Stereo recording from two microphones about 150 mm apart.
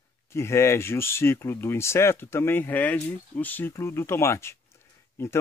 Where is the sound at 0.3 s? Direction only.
20° left (ahead or behind).